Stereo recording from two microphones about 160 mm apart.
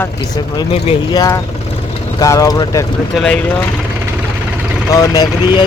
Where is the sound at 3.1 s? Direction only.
5° left (ahead or behind).